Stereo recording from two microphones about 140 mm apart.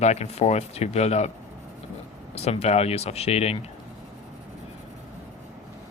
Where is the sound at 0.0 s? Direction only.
50° left (ahead or behind).